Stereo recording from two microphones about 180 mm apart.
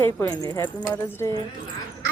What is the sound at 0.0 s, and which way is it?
Speech, 15° left (ahead or behind).